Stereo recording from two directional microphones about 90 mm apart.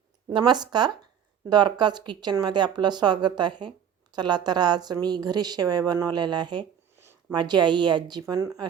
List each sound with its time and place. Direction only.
0.3 s speech: 55° right (ahead or behind)
6.9 s a sound: 30° right (ahead or behind)
7.3 s a woman's voice: 55° right (ahead or behind)